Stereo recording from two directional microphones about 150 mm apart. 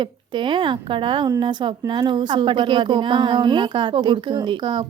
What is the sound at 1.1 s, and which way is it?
A woman's voice, 30° right (ahead or behind).